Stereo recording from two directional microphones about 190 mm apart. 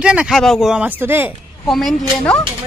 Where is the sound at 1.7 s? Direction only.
Centre (ahead or behind).